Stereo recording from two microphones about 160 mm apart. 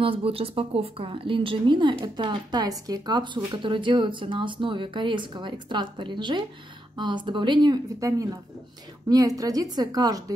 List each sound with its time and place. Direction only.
0.0 s speech: 35° right (ahead or behind)